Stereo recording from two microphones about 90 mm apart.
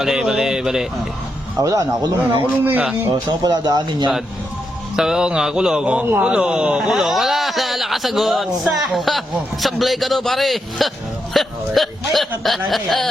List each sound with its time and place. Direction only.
0.0 s speech: 5° right (ahead or behind)
1.6 s speech: 45° right (ahead or behind)
2.4 s speech: 20° right (ahead or behind)
3.1 s speech: 45° right (ahead or behind)
4.9 s speech: 5° right (ahead or behind)